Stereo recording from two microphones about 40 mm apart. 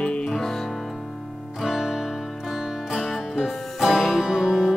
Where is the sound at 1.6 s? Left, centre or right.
Centre.